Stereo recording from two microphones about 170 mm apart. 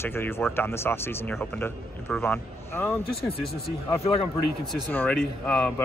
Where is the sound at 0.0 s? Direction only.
15° left (ahead or behind).